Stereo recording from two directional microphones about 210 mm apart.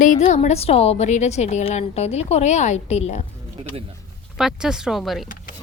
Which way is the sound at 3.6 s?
25° right (ahead or behind).